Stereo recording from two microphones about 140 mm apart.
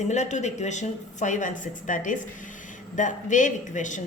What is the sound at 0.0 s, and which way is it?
Speech, 55° left (ahead or behind).